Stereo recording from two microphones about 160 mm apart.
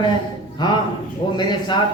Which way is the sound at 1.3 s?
30° left (ahead or behind).